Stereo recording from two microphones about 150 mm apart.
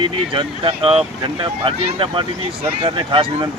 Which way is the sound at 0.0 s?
35° right (ahead or behind).